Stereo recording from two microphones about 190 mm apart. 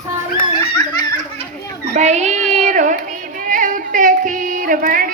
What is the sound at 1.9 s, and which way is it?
Child singing, 40° right (ahead or behind).